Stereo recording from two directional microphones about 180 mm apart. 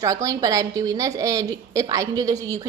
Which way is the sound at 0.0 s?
20° right (ahead or behind).